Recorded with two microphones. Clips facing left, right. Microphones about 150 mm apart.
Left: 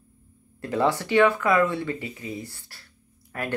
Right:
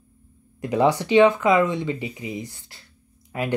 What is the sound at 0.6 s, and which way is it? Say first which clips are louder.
Speech: right 4 dB; 15° right (ahead or behind).